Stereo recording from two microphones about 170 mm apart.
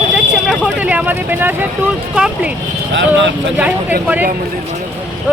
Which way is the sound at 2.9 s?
90° right.